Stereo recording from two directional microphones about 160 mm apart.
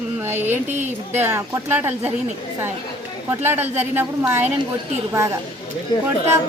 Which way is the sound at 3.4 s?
15° right (ahead or behind).